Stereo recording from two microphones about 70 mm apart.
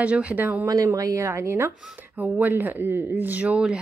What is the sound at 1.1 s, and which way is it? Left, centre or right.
Speech, right.